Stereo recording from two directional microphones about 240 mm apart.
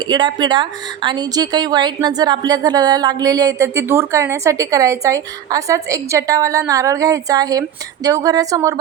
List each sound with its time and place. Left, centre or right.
0.1 s a woman's voice: centre